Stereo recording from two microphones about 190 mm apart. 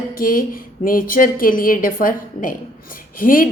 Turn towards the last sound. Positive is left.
turn(degrees=45)  # may be behind; listen again after turning